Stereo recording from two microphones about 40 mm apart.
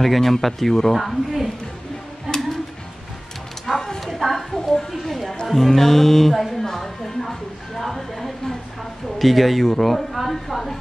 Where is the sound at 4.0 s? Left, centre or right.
Centre.